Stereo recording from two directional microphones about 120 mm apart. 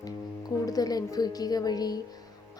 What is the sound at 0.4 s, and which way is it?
Music, 30° left (ahead or behind).